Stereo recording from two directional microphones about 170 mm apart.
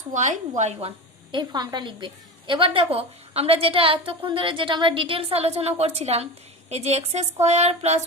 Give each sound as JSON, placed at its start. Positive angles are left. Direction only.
{"t": 0.1, "sound": "a woman's voice", "side_deg": -45}